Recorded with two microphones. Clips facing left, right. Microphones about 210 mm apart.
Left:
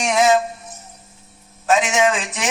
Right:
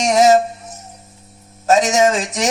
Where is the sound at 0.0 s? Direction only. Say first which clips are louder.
Right 4 dB; 40° right (ahead or behind).